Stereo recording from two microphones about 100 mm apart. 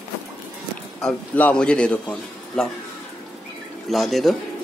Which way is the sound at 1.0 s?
10° left (ahead or behind).